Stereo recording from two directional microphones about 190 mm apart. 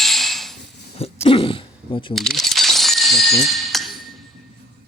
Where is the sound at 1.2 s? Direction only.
30° left (ahead or behind).